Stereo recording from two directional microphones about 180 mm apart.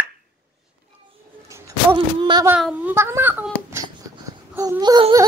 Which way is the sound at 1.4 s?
15° right (ahead or behind).